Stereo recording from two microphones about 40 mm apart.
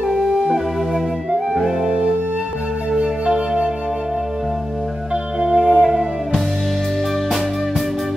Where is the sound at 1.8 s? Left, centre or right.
Right.